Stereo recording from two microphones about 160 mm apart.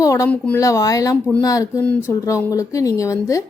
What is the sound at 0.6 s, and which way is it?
A woman's voice, 20° left (ahead or behind).